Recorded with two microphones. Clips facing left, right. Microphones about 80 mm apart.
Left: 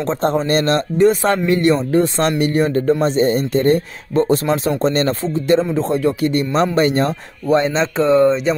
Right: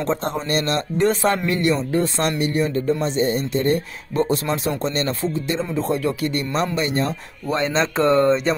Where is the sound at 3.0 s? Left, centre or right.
Left.